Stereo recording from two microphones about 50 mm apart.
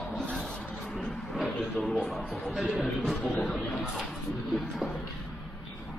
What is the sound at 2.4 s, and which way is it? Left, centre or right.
Speech, centre.